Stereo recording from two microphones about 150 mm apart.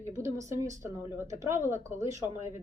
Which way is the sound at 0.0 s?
20° right (ahead or behind).